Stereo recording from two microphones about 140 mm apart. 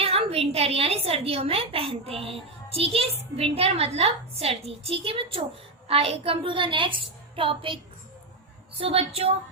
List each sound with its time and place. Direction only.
0.0 s a woman's voice: 45° right (ahead or behind)
8.8 s a woman's voice: 45° right (ahead or behind)